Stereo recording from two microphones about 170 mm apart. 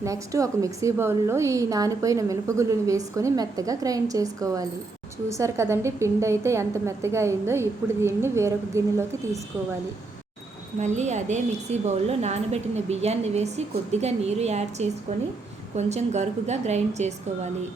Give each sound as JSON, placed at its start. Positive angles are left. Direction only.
{"t": 0.0, "sound": "a woman's voice", "side_deg": -20}
{"t": 10.8, "sound": "a woman's voice", "side_deg": -45}